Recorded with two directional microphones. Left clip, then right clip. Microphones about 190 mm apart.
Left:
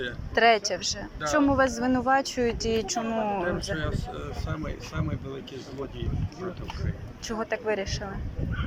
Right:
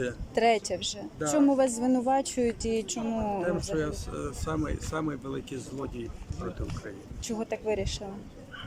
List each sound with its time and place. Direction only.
0.3 s speech: 25° right (ahead or behind)
3.4 s speech: 50° right (ahead or behind)
7.3 s speech: 15° right (ahead or behind)